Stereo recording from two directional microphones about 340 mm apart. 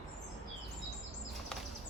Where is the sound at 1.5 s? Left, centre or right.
Centre.